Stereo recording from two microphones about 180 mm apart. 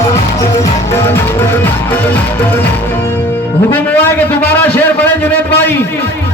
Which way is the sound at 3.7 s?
10° left (ahead or behind).